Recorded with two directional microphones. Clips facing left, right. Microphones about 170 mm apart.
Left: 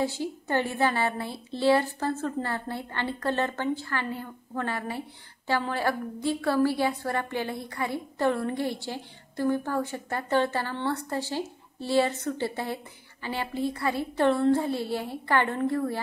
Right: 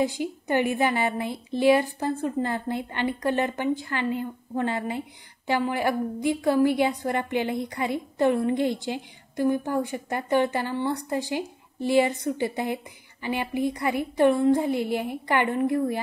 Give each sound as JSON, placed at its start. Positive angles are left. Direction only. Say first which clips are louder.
{"t": 0.0, "sound": "a woman's voice", "louder": "right 3 dB", "side_deg": -15}